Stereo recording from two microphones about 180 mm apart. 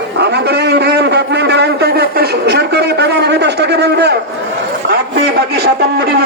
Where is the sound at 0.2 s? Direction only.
65° right (ahead or behind).